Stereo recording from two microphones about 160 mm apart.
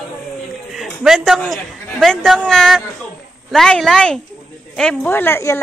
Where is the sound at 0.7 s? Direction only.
Centre (ahead or behind).